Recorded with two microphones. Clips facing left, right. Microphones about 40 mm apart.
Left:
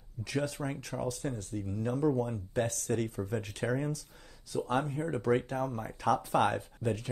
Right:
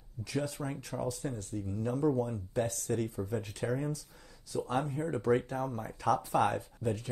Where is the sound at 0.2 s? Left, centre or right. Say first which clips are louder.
Left 2 dB; left.